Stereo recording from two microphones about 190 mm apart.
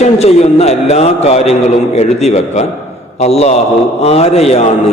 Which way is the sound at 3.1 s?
35° left (ahead or behind).